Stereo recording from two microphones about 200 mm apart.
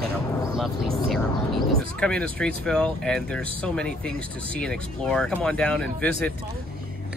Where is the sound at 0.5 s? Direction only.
Centre (ahead or behind).